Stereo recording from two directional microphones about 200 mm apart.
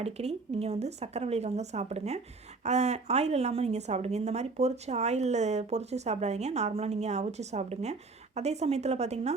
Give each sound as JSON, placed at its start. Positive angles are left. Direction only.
{"t": 0.0, "sound": "a woman's voice", "side_deg": -30}